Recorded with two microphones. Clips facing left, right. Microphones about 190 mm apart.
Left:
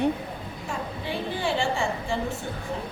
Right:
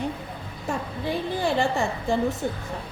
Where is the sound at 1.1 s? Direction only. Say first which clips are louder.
Right 3 dB; 40° right (ahead or behind).